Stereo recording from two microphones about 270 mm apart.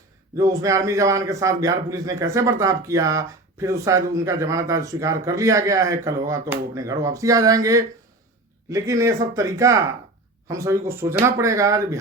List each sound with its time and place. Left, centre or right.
0.3 s speech: centre